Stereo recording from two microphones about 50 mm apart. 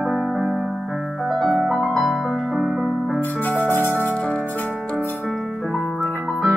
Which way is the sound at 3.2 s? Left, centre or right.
Left.